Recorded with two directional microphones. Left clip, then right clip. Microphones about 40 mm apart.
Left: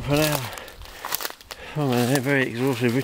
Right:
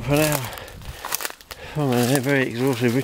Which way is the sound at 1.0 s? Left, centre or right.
Right.